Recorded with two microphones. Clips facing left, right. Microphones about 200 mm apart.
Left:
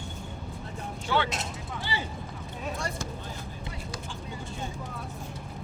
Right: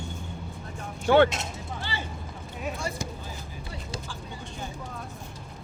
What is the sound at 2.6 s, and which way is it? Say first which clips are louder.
Speech: right 2 dB; 10° right (ahead or behind).